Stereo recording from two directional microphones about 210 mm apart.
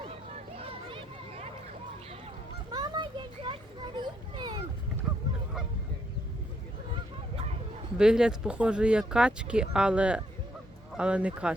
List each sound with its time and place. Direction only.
0.5 s a sound: 25° right (ahead or behind)
2.7 s children playing: 20° right (ahead or behind)
7.9 s speech: 5° right (ahead or behind)